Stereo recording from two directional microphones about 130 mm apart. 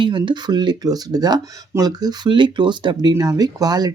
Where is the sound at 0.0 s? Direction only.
35° right (ahead or behind).